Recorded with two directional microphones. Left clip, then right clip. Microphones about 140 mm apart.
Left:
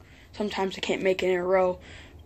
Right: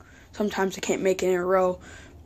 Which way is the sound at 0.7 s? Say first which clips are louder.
Right 1 dB; 30° right (ahead or behind).